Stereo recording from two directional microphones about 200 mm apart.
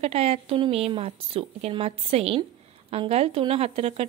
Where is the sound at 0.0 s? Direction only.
30° right (ahead or behind).